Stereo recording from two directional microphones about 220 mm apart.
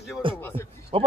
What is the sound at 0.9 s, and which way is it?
Speech, 25° right (ahead or behind).